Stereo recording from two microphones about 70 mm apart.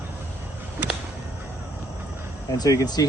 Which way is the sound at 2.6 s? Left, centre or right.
Left.